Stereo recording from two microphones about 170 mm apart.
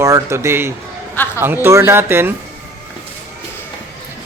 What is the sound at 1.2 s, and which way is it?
Speech, 10° left (ahead or behind).